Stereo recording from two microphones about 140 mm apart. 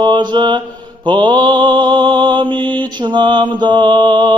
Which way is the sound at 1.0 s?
35° right (ahead or behind).